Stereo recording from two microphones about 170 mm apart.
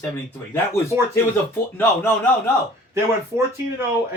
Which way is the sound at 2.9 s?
15° right (ahead or behind).